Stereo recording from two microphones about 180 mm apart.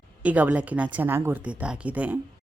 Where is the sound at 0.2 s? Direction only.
10° right (ahead or behind).